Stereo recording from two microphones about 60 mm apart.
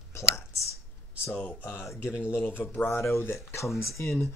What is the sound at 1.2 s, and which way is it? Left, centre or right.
Speech, left.